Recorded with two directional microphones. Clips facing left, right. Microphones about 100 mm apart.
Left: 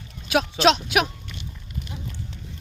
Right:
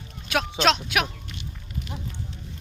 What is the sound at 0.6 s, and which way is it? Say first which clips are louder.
Speech: left 3 dB; 15° left (ahead or behind).